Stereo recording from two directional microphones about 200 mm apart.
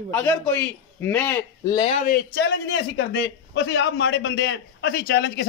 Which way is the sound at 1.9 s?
40° left (ahead or behind).